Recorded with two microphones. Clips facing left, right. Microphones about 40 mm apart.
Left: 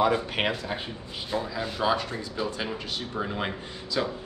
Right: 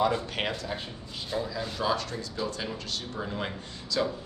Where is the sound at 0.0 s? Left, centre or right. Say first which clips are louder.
Left 3 dB; centre.